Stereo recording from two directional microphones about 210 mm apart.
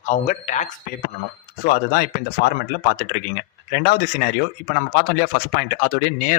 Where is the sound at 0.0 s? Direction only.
35° left (ahead or behind).